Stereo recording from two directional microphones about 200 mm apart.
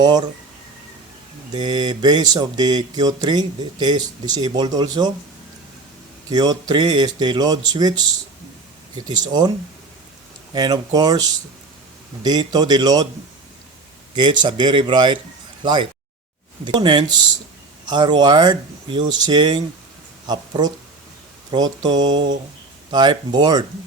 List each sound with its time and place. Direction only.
0.0 s speech: 20° right (ahead or behind)
1.5 s speech: 20° right (ahead or behind)
6.3 s speech: 20° right (ahead or behind)
9.0 s speech: 20° right (ahead or behind)
10.5 s speech: 20° right (ahead or behind)
12.2 s speech: 20° right (ahead or behind)
14.2 s speech: 20° right (ahead or behind)